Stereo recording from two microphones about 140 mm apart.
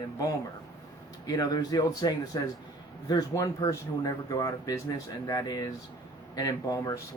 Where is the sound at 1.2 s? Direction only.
25° left (ahead or behind).